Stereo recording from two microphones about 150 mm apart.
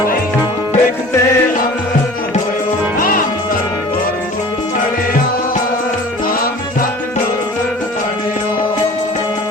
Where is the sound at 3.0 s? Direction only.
70° left (ahead or behind).